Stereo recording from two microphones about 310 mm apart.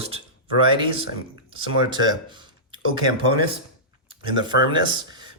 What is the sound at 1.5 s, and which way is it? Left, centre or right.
Speech, centre.